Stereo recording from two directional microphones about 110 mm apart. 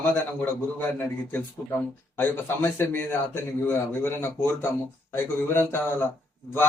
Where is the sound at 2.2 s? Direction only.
20° left (ahead or behind).